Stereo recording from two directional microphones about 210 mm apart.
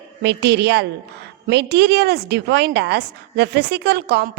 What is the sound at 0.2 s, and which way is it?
Speech, 55° right (ahead or behind).